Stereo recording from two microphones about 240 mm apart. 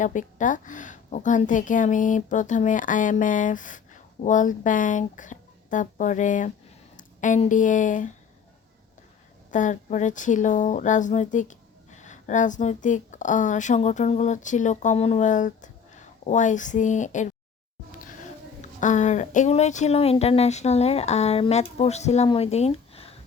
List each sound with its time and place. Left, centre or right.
0.0 s speech: left
9.5 s speech: left
18.6 s speech: left